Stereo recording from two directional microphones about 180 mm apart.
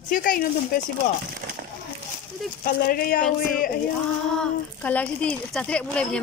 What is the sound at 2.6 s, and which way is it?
Speech, 55° left (ahead or behind).